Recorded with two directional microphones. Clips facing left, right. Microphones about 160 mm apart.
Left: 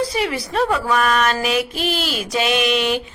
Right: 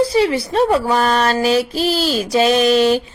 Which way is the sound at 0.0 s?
30° right (ahead or behind).